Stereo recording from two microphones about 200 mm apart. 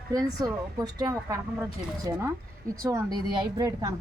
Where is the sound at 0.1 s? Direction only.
20° right (ahead or behind).